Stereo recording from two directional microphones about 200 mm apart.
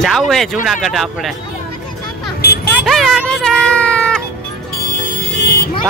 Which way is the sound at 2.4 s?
50° left (ahead or behind).